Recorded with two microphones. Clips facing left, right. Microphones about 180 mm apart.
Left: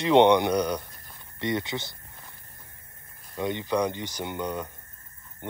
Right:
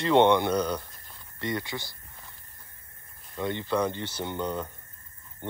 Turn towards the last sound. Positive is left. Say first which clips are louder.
# even
turn(degrees=10)  # may be behind; listen again after turning